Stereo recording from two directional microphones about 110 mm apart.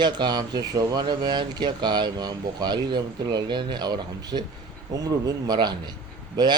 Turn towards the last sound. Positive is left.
turn(degrees=-40)  # may be behind; listen again after turning